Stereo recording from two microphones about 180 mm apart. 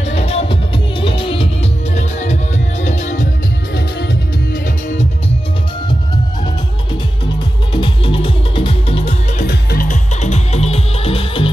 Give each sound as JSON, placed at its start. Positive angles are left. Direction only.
{"t": 0.1, "sound": "music", "side_deg": 35}
{"t": 7.7, "sound": "music", "side_deg": 30}
{"t": 9.5, "sound": "music", "side_deg": 60}
{"t": 9.8, "sound": "music", "side_deg": 40}